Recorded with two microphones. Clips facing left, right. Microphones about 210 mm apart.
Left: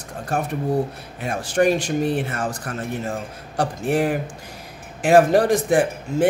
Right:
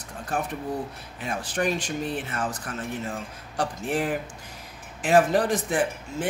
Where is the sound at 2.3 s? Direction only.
45° left (ahead or behind).